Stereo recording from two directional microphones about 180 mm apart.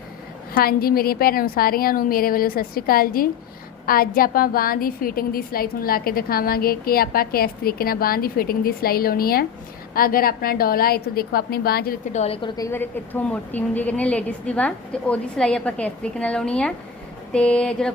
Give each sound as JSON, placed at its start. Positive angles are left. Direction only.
{"t": 0.5, "sound": "a woman's voice", "side_deg": 55}
{"t": 12.1, "sound": "a woman's voice", "side_deg": 35}
{"t": 12.5, "sound": "a woman's voice", "side_deg": 10}
{"t": 17.3, "sound": "a sound", "side_deg": 5}